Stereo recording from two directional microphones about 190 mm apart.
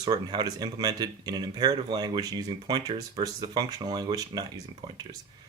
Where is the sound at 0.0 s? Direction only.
20° right (ahead or behind).